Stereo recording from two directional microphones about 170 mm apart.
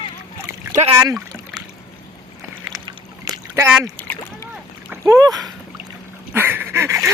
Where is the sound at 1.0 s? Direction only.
20° right (ahead or behind).